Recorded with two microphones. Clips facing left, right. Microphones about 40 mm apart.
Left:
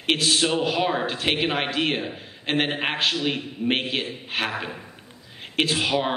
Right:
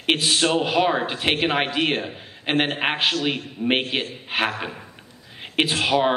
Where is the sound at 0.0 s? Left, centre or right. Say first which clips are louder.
Right 1 dB; centre.